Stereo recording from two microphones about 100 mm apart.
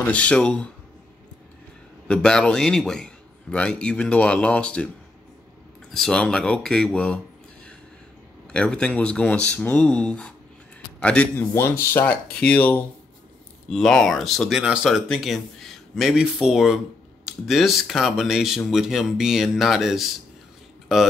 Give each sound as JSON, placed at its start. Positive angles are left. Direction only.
{"t": 0.0, "sound": "a man's voice", "side_deg": 15}
{"t": 2.0, "sound": "a man's voice", "side_deg": 10}
{"t": 8.5, "sound": "a man's voice", "side_deg": 10}
{"t": 11.5, "sound": "a man's voice", "side_deg": 25}
{"t": 13.7, "sound": "speech", "side_deg": 5}